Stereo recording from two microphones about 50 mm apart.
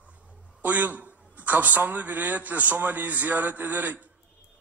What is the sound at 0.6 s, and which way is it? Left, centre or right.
A man's voice, right.